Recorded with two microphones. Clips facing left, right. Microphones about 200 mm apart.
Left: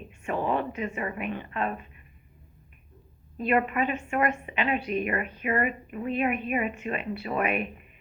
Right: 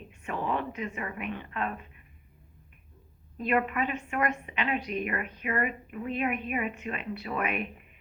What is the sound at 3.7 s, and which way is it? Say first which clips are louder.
A woman's voice: left 3 dB; 5° left (ahead or behind).